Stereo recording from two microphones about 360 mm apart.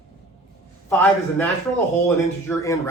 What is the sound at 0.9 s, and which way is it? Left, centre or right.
A woman's voice, centre.